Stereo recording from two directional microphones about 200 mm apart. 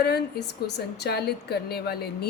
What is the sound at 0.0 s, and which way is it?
A woman's voice, 55° left (ahead or behind).